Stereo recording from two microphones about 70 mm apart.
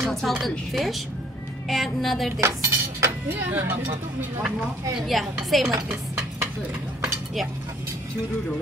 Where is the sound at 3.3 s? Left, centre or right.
Right.